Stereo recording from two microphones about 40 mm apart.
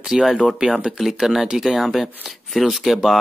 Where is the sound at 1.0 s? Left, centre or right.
Centre.